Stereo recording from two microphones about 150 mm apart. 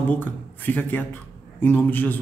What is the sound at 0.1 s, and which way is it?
Speech, 15° left (ahead or behind).